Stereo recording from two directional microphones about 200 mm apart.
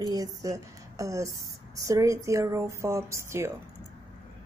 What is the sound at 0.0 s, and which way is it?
Speech, 20° right (ahead or behind).